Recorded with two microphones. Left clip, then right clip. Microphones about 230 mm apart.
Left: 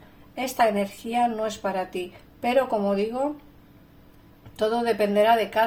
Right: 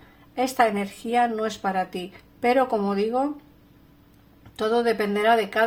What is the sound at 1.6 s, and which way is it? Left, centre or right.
Speech, right.